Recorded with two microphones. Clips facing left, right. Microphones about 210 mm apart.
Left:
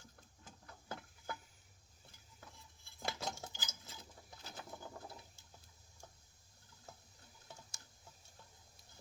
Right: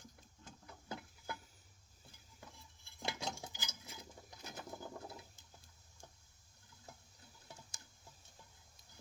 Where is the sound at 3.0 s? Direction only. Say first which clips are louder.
Even; 5° left (ahead or behind).